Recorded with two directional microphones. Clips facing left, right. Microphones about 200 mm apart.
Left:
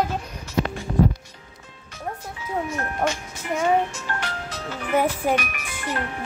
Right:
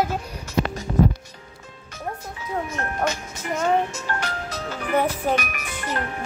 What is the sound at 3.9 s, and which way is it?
Music, 40° right (ahead or behind).